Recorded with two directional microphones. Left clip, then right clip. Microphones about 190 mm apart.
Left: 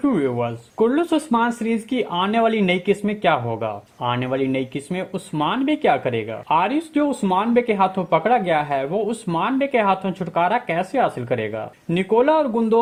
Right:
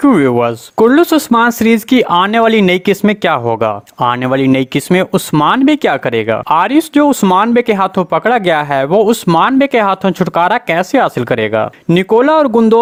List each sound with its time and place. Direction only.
0.0 s speech: 50° right (ahead or behind)